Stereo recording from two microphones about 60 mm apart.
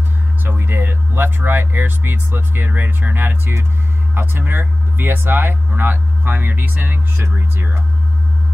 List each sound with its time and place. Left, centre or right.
0.4 s speech: right